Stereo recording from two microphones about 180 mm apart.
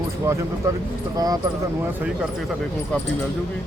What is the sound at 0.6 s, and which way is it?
Speech, 15° right (ahead or behind).